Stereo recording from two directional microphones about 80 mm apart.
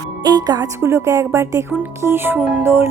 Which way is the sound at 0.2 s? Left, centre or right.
Right.